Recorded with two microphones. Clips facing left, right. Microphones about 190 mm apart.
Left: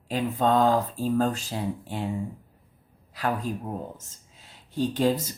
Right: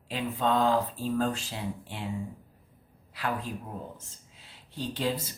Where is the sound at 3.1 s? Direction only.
45° left (ahead or behind).